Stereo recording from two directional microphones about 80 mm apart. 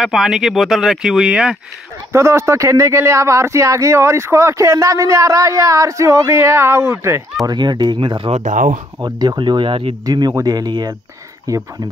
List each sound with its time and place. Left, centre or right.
0.0 s speech: centre
2.1 s speech: right
7.4 s speech: right
9.0 s speech: right
10.0 s speech: right
11.5 s speech: right